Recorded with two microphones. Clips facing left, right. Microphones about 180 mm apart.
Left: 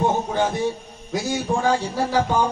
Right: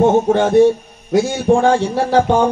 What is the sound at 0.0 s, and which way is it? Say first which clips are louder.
A man's voice: right 9 dB; 65° right (ahead or behind).